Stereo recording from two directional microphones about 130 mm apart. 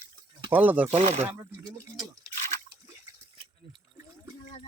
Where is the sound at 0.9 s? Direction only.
60° right (ahead or behind).